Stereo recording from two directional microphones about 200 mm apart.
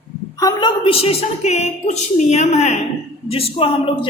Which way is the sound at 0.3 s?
20° left (ahead or behind).